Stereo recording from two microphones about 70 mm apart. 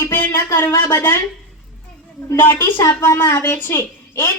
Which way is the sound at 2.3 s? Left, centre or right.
Left.